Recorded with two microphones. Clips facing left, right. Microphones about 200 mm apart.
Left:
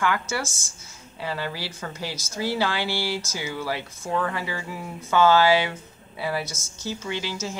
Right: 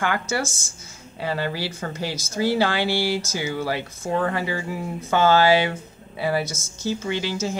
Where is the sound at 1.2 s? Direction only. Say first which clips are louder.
Right 4 dB; 50° right (ahead or behind).